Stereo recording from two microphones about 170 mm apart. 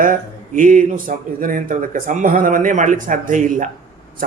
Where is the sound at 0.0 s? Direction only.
50° right (ahead or behind).